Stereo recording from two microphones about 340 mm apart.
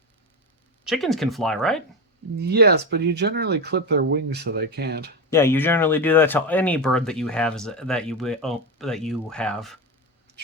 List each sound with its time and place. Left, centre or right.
0.9 s speech: centre
2.4 s speech: right
5.3 s speech: centre